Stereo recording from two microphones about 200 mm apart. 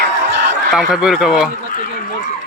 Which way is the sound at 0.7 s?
Centre (ahead or behind).